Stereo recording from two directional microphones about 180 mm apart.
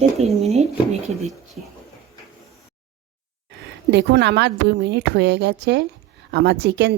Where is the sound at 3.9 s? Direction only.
70° right (ahead or behind).